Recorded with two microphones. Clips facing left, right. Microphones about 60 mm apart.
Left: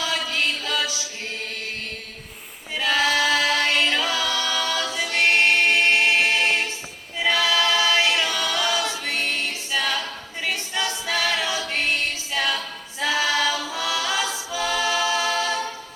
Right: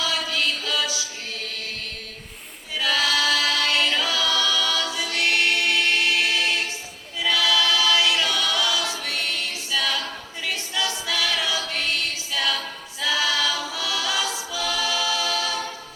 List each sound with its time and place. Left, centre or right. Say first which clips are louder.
0.0 s music: even; left
2.7 s choir: left 2 dB; left
7.2 s a capella: left 1 dB; left
13.0 s choir: left 2 dB; left